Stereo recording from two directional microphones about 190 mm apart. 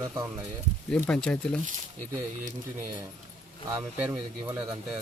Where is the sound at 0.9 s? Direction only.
5° left (ahead or behind).